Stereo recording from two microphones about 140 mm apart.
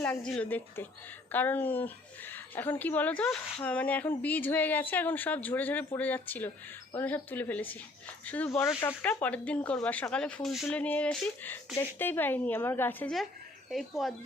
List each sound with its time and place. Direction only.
0.3 s a woman's voice: 10° left (ahead or behind)
8.4 s speech: 20° left (ahead or behind)
9.0 s a woman's voice: 10° left (ahead or behind)
13.7 s speech: centre (ahead or behind)